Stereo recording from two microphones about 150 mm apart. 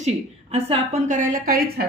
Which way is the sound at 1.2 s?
70° right (ahead or behind).